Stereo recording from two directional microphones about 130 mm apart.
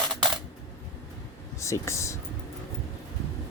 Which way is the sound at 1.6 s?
25° left (ahead or behind).